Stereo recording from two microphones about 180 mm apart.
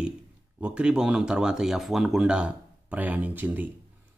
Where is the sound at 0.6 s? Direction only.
5° right (ahead or behind).